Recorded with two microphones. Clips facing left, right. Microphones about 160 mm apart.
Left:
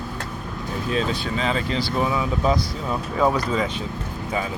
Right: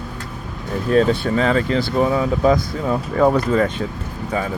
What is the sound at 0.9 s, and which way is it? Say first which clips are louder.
Speech: right 10 dB; 55° right (ahead or behind).